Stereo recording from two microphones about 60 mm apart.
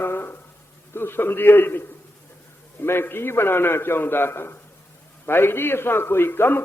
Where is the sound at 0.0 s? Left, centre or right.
Left.